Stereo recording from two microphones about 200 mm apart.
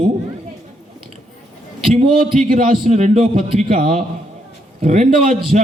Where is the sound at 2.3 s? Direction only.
45° right (ahead or behind).